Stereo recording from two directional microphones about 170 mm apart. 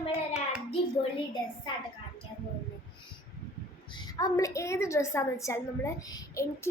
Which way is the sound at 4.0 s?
25° left (ahead or behind).